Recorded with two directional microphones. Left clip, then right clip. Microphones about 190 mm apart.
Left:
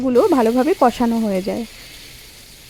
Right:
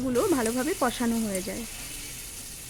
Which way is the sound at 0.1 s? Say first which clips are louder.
Left 12 dB; 20° left (ahead or behind).